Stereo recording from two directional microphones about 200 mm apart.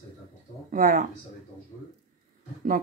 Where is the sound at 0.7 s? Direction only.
40° right (ahead or behind).